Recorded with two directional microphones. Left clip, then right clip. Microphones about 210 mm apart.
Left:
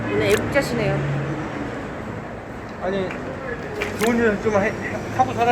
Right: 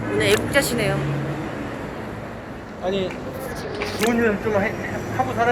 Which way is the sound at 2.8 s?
10° left (ahead or behind).